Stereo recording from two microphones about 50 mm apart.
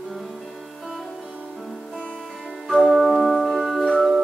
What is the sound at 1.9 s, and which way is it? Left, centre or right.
Music, left.